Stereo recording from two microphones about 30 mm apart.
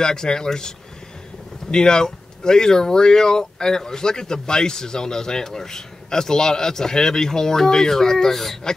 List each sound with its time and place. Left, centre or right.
0.0 s speech: left